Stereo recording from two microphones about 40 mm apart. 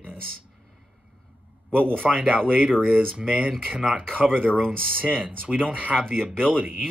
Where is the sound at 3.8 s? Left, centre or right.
Centre.